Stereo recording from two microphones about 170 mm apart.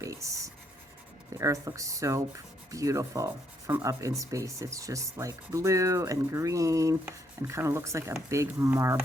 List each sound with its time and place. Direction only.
0.0 s writing: 20° right (ahead or behind)
1.4 s speech: 20° right (ahead or behind)